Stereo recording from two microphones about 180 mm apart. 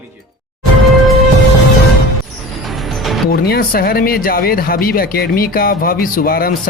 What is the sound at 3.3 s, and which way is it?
Speech, 60° left (ahead or behind).